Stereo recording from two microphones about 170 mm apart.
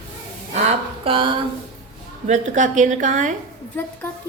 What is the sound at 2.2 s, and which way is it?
A woman's voice, 45° right (ahead or behind).